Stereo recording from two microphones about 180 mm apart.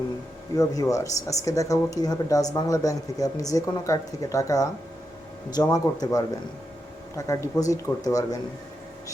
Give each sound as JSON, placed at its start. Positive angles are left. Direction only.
{"t": 0.5, "sound": "speech", "side_deg": 20}